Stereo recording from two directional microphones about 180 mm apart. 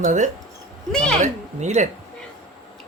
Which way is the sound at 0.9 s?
5° left (ahead or behind).